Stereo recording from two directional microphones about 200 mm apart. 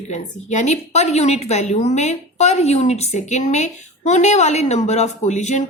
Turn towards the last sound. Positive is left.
turn(degrees=35)  # may be behind; listen again after turning